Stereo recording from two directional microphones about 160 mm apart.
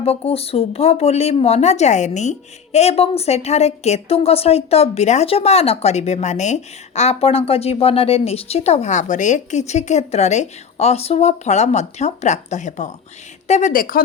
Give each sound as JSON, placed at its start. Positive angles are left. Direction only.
{"t": 0.0, "sound": "a woman's voice", "side_deg": 40}